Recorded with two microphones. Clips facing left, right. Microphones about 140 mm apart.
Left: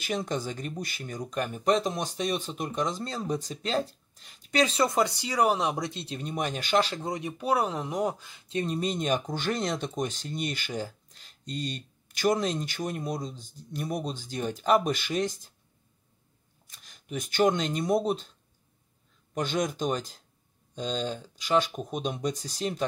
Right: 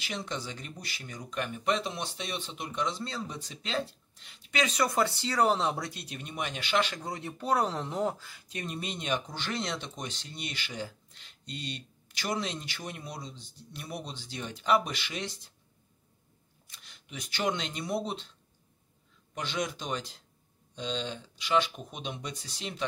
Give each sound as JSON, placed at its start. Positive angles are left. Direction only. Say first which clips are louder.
{"t": 0.0, "sound": "speech", "louder": "left 6 dB", "side_deg": 45}
{"t": 7.0, "sound": "speech", "louder": "left 5 dB", "side_deg": 20}
{"t": 16.6, "sound": "speech", "louder": "left 8 dB", "side_deg": 45}
{"t": 19.3, "sound": "speech", "louder": "left 5 dB", "side_deg": 45}